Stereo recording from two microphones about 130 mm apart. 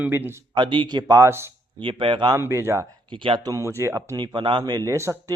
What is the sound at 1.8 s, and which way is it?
Speech, 40° right (ahead or behind).